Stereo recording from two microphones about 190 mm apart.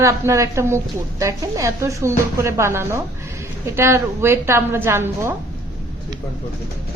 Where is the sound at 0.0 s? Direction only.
15° right (ahead or behind).